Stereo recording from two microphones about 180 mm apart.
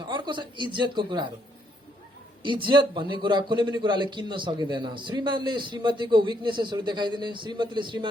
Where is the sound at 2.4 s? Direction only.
25° right (ahead or behind).